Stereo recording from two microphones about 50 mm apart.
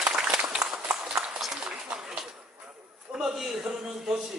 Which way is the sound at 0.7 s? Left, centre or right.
Centre.